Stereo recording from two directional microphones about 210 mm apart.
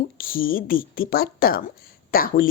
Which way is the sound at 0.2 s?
40° left (ahead or behind).